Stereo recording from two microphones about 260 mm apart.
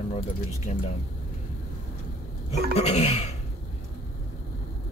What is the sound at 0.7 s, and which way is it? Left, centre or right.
Speech, left.